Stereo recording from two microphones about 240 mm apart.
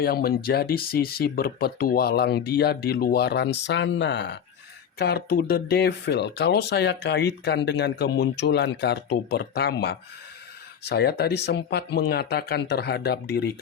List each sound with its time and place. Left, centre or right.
0.0 s speech: left